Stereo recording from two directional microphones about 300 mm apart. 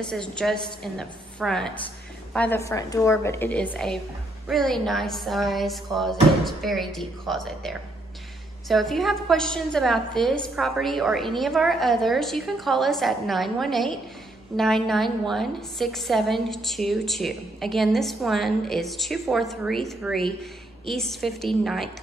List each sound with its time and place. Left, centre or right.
0.1 s a woman's voice: centre